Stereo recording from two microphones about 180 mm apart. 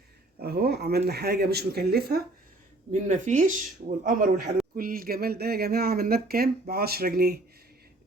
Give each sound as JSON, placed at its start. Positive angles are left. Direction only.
{"t": 0.3, "sound": "speech", "side_deg": -60}
{"t": 2.9, "sound": "speech", "side_deg": -40}